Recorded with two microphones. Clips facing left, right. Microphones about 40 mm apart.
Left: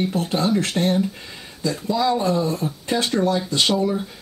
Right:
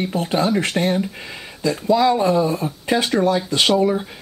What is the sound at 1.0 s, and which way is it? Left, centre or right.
Speech, right.